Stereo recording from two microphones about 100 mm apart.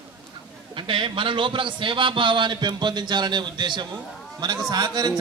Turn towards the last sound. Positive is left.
turn(degrees=-45)  # may be behind; listen again after turning